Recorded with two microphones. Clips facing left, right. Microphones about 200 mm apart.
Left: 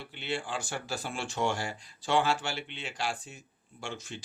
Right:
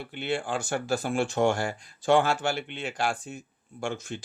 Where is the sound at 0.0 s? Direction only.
50° right (ahead or behind).